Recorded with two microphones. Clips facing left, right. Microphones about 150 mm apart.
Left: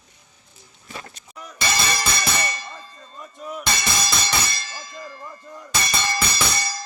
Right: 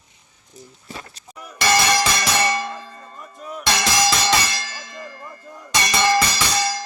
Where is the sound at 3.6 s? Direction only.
90° right.